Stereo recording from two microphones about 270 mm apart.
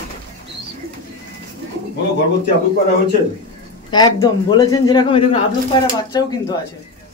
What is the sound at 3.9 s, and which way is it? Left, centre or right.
A man's voice, centre.